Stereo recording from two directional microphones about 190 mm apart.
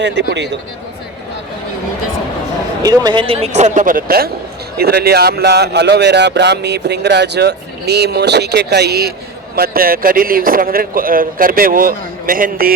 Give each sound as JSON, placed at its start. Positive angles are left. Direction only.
{"t": 0.0, "sound": "speech", "side_deg": -65}
{"t": 2.8, "sound": "a man's voice", "side_deg": -20}